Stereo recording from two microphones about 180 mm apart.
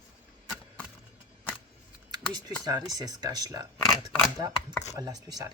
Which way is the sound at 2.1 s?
25° right (ahead or behind).